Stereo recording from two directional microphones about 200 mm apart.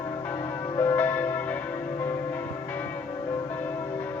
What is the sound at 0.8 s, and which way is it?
Church bell, 10° left (ahead or behind).